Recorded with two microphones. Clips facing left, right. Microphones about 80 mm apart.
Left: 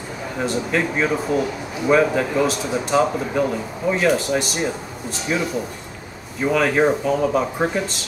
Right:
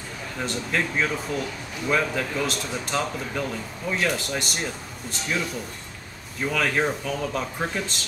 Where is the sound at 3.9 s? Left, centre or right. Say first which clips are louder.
Left 7 dB; centre.